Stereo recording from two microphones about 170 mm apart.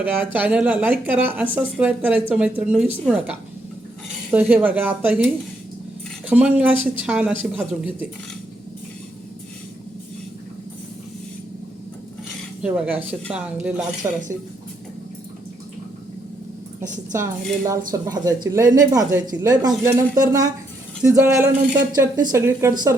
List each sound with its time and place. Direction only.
0.3 s speech: 10° right (ahead or behind)
6.2 s speech: 10° right (ahead or behind)
12.6 s speech: 5° right (ahead or behind)
14.0 s speech: 20° right (ahead or behind)
17.1 s speech: 15° right (ahead or behind)